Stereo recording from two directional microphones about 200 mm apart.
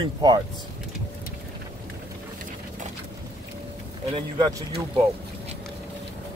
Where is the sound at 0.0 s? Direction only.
20° right (ahead or behind).